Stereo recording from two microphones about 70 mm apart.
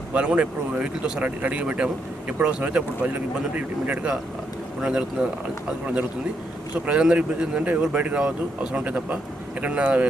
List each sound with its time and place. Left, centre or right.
0.1 s speech: centre